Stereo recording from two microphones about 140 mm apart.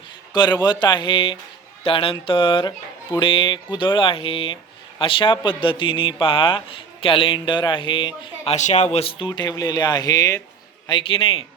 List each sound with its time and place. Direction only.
0.3 s speech: 30° left (ahead or behind)
8.4 s speech: 55° left (ahead or behind); by 10.4 s 25° left (ahead or behind)
10.8 s speech: 40° left (ahead or behind)